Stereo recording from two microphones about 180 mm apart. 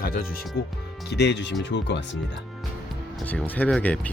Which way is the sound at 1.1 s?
75° left (ahead or behind).